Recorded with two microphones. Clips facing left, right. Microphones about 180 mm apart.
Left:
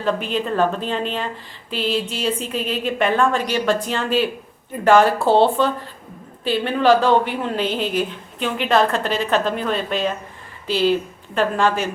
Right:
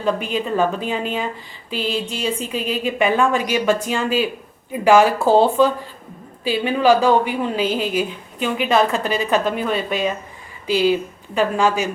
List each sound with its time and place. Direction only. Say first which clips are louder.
0.0 s a woman's voice: right 1 dB; 5° right (ahead or behind)